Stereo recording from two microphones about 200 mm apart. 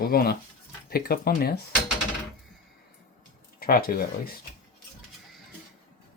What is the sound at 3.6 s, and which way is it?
Speech, 50° left (ahead or behind).